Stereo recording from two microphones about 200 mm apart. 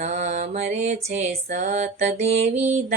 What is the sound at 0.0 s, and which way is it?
Mantra, 35° right (ahead or behind).